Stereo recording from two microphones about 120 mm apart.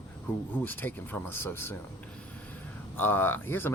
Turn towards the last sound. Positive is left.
turn(degrees=15)  # may be behind; listen again after turning